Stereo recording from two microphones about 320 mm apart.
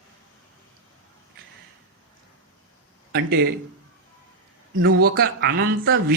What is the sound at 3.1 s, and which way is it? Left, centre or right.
Speech, right.